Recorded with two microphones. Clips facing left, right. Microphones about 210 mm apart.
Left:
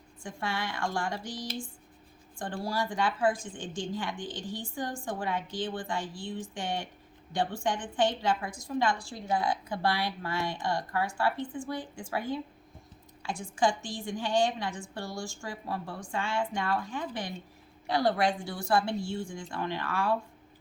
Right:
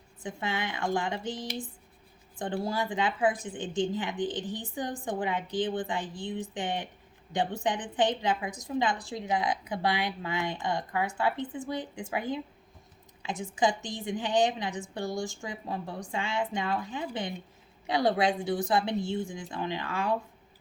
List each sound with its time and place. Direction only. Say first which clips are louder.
0.2 s a woman's voice: right 1 dB; 20° right (ahead or behind)